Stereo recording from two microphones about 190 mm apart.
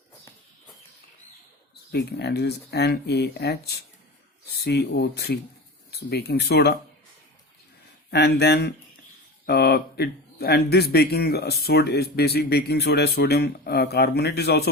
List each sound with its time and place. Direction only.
1.9 s speech: 60° left (ahead or behind)
8.1 s speech: 60° left (ahead or behind)